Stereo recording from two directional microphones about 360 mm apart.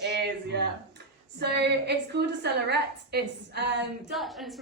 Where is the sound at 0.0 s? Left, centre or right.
Right.